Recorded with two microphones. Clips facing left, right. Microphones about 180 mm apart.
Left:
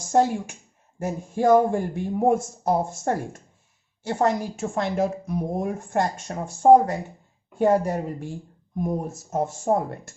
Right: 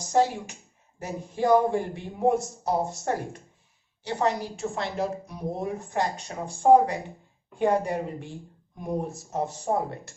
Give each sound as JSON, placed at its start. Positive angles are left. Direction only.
{"t": 0.1, "sound": "speech", "side_deg": 50}